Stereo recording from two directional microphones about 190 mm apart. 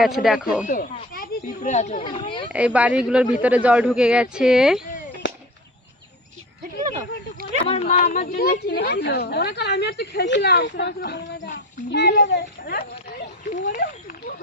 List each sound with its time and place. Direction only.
0.0 s speech: centre (ahead or behind)
0.6 s speech: 45° left (ahead or behind); by 2.4 s 25° left (ahead or behind)
2.5 s speech: 5° right (ahead or behind)
5.2 s whip: 70° left (ahead or behind)
7.7 s speech: 35° left (ahead or behind)
7.9 s a woman's voice: 55° left (ahead or behind)
13.7 s speech: 50° left (ahead or behind)